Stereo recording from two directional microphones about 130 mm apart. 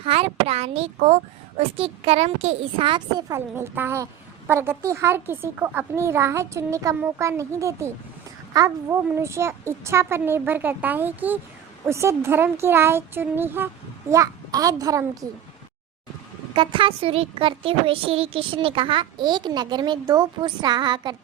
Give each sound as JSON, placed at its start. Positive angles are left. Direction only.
{"t": 0.0, "sound": "speech", "side_deg": -50}
{"t": 3.2, "sound": "a woman's voice", "side_deg": -25}
{"t": 16.6, "sound": "a woman's voice", "side_deg": -40}